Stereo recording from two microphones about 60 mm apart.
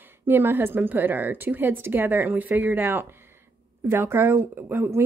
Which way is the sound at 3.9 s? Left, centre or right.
Right.